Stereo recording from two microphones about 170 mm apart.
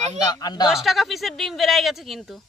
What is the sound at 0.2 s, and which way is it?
Speech, 25° left (ahead or behind).